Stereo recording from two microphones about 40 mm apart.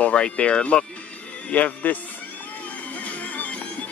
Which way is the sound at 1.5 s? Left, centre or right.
Left.